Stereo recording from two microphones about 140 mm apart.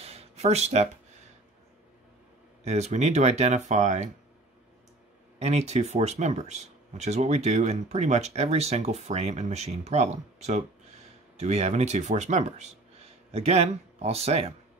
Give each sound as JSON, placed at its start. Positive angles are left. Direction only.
{"t": 0.0, "sound": "a sound", "side_deg": -45}
{"t": 2.6, "sound": "speech", "side_deg": -50}
{"t": 5.4, "sound": "speech", "side_deg": -50}